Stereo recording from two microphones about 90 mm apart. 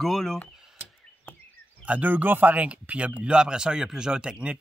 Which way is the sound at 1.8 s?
15° right (ahead or behind).